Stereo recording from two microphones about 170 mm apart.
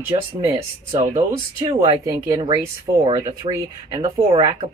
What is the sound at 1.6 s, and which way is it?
Speech, 30° right (ahead or behind).